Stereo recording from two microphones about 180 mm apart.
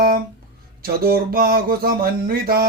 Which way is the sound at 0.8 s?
55° right (ahead or behind).